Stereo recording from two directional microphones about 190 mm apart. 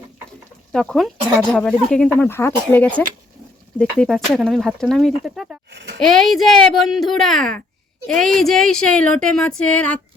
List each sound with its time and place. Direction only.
0.7 s speech: 5° left (ahead or behind)
5.7 s a child's voice: 60° right (ahead or behind)
6.0 s speech: centre (ahead or behind)